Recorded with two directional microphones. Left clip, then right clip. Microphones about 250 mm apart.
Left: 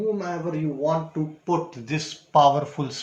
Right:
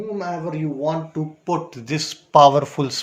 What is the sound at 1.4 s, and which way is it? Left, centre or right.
Speech, right.